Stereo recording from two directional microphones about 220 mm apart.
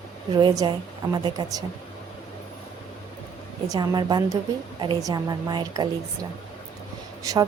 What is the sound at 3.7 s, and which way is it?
A woman's voice, 20° right (ahead or behind).